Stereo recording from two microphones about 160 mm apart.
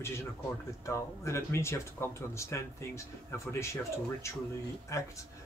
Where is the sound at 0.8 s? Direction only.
20° left (ahead or behind).